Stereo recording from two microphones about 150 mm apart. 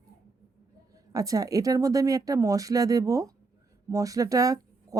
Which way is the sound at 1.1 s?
25° right (ahead or behind).